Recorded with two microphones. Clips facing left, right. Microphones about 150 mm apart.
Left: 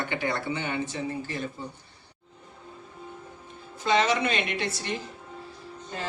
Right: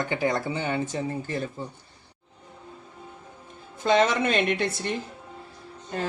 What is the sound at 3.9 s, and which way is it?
Speech, 50° right (ahead or behind).